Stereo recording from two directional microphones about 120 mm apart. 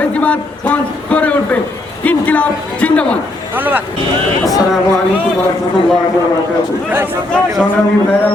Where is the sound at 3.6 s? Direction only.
15° right (ahead or behind).